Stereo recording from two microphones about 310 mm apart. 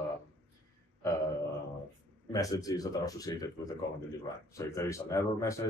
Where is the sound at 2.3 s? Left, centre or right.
Centre.